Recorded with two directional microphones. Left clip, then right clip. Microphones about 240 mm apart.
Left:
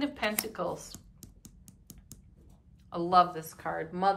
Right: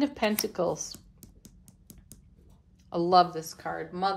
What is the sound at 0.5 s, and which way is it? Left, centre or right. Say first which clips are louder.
Speech: right 6 dB; centre.